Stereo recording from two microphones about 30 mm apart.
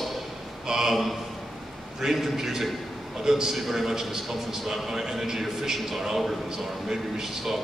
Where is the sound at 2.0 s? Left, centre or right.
Centre.